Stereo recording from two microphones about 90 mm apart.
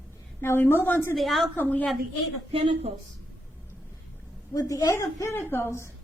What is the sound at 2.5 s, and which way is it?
Speech, 80° right.